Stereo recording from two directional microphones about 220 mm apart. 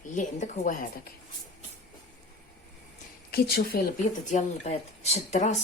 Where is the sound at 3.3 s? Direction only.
45° left (ahead or behind).